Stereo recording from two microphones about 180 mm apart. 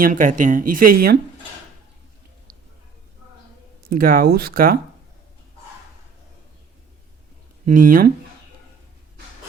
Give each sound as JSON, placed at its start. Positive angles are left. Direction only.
{"t": 0.0, "sound": "speech", "side_deg": -45}
{"t": 3.8, "sound": "speech", "side_deg": -55}
{"t": 7.6, "sound": "speech", "side_deg": -50}